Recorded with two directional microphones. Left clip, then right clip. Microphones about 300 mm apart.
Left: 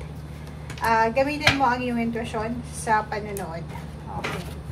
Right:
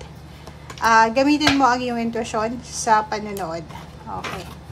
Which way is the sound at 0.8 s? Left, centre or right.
Centre.